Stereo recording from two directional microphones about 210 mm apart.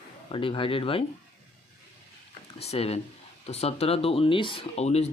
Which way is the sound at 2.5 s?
30° left (ahead or behind).